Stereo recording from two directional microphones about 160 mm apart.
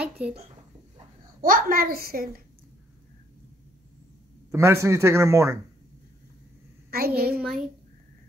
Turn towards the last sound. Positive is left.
turn(degrees=-5)  # may be behind; listen again after turning